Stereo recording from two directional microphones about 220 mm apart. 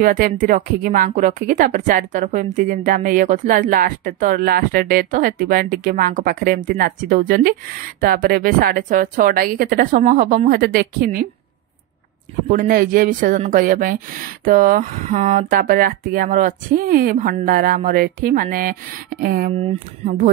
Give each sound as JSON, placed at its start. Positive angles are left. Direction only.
{"t": 0.0, "sound": "a woman's voice", "side_deg": -40}
{"t": 12.4, "sound": "a woman's voice", "side_deg": -40}
{"t": 19.5, "sound": "a woman's voice", "side_deg": -30}